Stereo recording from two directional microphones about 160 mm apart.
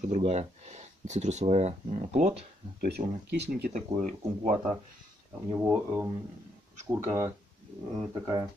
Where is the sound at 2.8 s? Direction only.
85° right.